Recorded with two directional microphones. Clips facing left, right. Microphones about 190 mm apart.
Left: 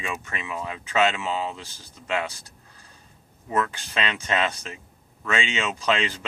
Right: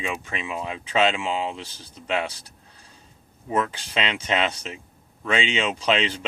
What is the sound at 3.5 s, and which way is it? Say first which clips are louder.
Speech: right 1 dB; 20° right (ahead or behind).